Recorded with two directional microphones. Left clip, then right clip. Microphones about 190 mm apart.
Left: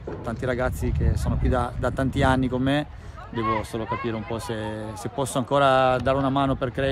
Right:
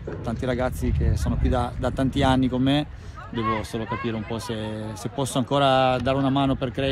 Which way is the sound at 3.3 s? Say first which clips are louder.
Left 1 dB; 45° left (ahead or behind).